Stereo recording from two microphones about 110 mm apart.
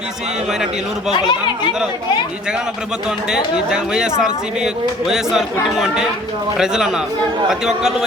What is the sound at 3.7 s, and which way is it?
A man's voice, 5° right (ahead or behind).